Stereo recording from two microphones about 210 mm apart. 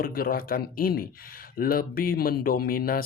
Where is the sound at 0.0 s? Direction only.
45° left (ahead or behind).